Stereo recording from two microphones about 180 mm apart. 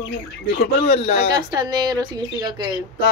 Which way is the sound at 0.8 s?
35° left (ahead or behind).